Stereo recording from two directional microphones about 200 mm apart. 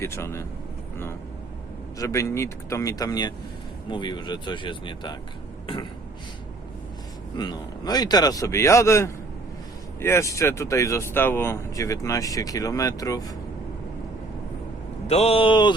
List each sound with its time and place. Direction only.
0.0 s speech: 15° left (ahead or behind)
2.0 s speech: 15° left (ahead or behind)
7.3 s speech: 20° left (ahead or behind)
15.0 s speech: 30° left (ahead or behind)